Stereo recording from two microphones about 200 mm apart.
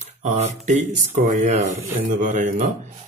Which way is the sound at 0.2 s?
35° right (ahead or behind).